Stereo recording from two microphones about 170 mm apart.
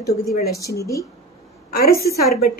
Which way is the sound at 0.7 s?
20° left (ahead or behind).